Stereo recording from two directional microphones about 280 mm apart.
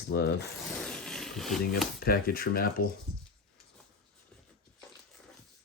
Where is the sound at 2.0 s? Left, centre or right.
Left.